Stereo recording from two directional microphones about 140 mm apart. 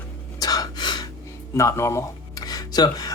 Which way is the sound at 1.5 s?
20° left (ahead or behind).